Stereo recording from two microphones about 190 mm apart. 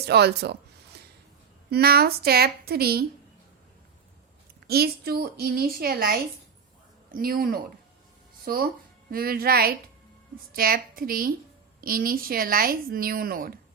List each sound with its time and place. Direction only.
0.0 s a woman's voice: 60° right (ahead or behind)
4.6 s speech: 55° right (ahead or behind)